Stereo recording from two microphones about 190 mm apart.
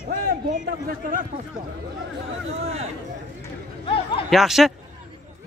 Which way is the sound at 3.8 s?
30° left (ahead or behind).